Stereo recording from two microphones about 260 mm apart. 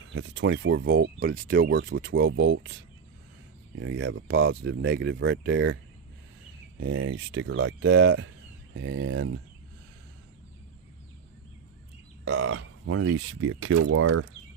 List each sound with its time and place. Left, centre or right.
0.1 s speech: right
3.8 s speech: right
12.2 s speech: right